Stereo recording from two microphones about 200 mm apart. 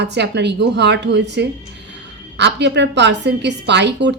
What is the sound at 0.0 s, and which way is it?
A woman's voice, 60° right (ahead or behind).